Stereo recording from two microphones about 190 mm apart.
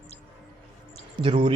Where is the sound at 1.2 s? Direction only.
25° right (ahead or behind).